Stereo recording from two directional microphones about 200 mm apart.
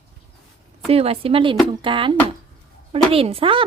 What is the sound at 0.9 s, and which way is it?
Speech, 30° right (ahead or behind).